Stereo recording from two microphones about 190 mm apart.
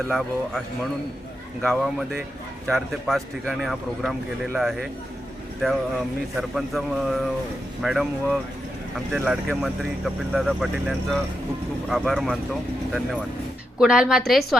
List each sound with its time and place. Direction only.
0.1 s speech: centre (ahead or behind)
1.6 s speech: centre (ahead or behind)
6.3 s speech: centre (ahead or behind)
13.7 s speech: 5° right (ahead or behind)